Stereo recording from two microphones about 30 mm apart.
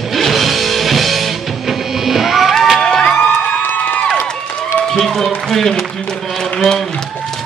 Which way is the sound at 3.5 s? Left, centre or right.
Left.